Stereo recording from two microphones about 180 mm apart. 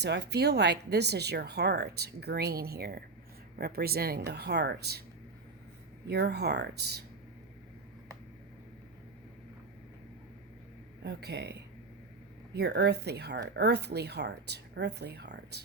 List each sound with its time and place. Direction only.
0.0 s speech: 70° right (ahead or behind)
6.1 s speech: 65° right (ahead or behind)
11.0 s speech: 70° right (ahead or behind)
12.5 s speech: 65° right (ahead or behind)